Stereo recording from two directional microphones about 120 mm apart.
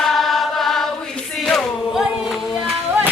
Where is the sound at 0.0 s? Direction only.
Centre (ahead or behind).